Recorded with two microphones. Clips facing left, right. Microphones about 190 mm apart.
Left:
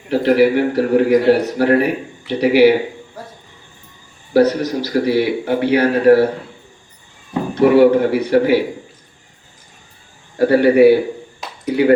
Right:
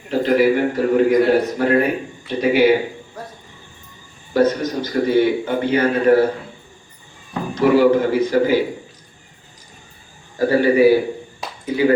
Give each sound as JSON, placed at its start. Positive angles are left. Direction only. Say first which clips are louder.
{"t": 0.1, "sound": "a man's voice", "louder": "left 2 dB", "side_deg": 70}
{"t": 4.4, "sound": "a man's voice", "louder": "left 3 dB", "side_deg": 75}
{"t": 7.5, "sound": "a man's voice", "louder": "left 3 dB", "side_deg": 60}
{"t": 10.3, "sound": "a man's voice", "louder": "left 3 dB", "side_deg": 65}